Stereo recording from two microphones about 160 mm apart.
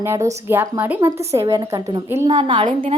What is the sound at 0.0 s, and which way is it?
A woman's voice, 20° right (ahead or behind).